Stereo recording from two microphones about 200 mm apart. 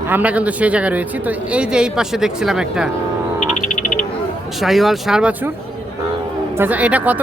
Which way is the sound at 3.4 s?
40° left (ahead or behind).